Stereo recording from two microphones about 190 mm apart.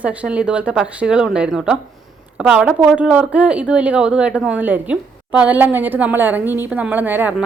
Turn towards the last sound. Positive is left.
turn(degrees=-10)  # may be behind; listen again after turning